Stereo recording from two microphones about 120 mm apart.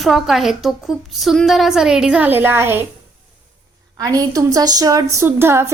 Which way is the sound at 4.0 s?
30° right (ahead or behind).